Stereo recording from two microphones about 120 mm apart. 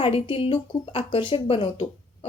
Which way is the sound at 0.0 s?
45° left (ahead or behind).